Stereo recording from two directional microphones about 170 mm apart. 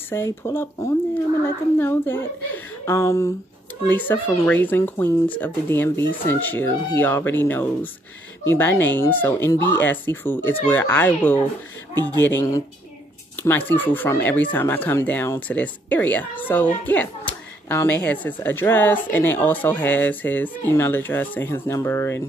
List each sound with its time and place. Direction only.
0.1 s speech: 15° left (ahead or behind)
11.9 s speech: 25° right (ahead or behind)
12.2 s speech: 15° left (ahead or behind)